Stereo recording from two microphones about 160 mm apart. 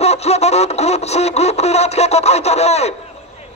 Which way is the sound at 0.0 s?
40° left (ahead or behind).